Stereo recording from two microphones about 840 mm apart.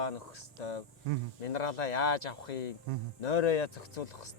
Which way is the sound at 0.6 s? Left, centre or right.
Left.